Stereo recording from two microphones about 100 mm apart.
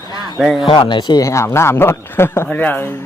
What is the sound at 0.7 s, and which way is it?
Speech, 55° left (ahead or behind).